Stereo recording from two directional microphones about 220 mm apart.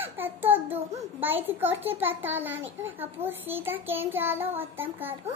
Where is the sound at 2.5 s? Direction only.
60° right (ahead or behind).